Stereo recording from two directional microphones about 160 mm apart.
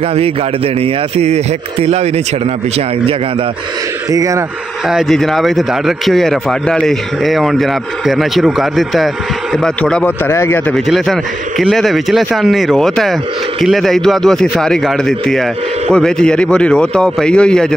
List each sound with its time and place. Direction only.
0.7 s speech: 40° right (ahead or behind)
4.1 s speech: 20° right (ahead or behind)
4.8 s speech: centre (ahead or behind); by 10.6 s 15° left (ahead or behind)
10.7 s speech: centre (ahead or behind)